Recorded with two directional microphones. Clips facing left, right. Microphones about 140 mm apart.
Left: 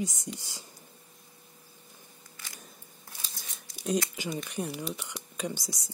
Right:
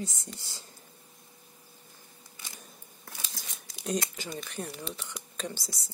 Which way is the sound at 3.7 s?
90° right.